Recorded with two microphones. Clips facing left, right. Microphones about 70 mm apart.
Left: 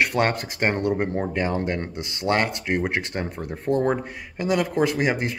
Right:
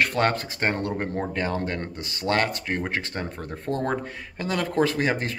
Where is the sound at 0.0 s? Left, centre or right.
Centre.